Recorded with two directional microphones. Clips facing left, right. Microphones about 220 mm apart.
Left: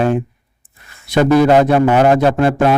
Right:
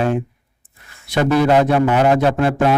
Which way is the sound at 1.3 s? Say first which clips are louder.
Left 3 dB; 40° left (ahead or behind).